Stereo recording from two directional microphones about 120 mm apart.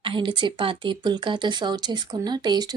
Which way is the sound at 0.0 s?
45° right (ahead or behind).